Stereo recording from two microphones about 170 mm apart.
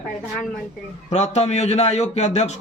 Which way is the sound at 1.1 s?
40° left (ahead or behind).